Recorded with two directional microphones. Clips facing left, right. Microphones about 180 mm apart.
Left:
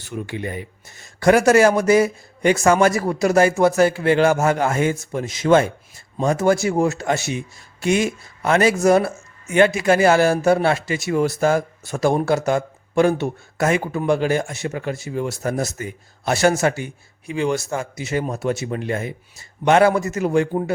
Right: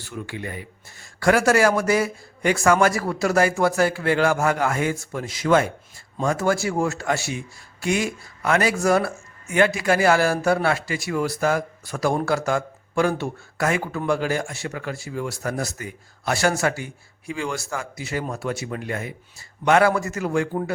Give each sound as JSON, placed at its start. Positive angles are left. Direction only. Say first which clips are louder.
{"t": 0.0, "sound": "a man's voice", "louder": "left 4 dB", "side_deg": 20}